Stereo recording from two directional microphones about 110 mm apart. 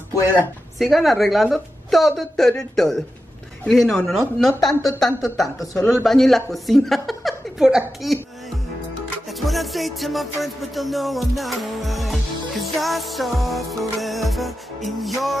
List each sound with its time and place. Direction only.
0.7 s music: centre (ahead or behind)
6.0 s a woman's voice: centre (ahead or behind)
9.4 s music: centre (ahead or behind)